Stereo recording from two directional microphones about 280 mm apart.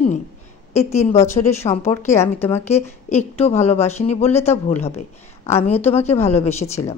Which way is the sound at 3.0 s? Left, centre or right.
Left.